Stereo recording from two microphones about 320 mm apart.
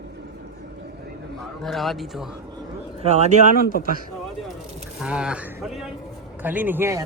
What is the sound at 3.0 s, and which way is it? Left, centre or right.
Speech, right.